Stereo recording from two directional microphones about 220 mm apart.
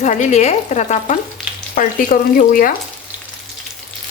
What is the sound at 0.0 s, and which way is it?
Frying, 35° left (ahead or behind).